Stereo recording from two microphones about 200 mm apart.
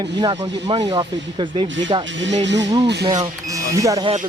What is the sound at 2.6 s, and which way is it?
Speech, 20° right (ahead or behind).